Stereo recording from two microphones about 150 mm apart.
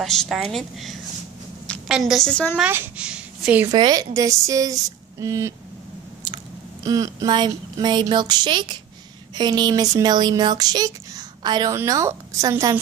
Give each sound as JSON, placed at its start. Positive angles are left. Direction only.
{"t": 0.0, "sound": "speech", "side_deg": 0}
{"t": 2.5, "sound": "speech", "side_deg": -10}
{"t": 3.6, "sound": "speech", "side_deg": -25}